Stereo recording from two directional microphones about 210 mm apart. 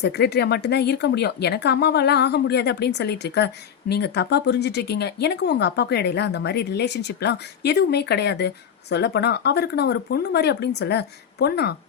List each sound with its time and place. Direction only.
0.0 s speech: 50° left (ahead or behind)